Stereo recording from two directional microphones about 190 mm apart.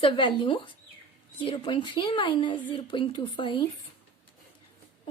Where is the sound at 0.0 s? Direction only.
25° left (ahead or behind).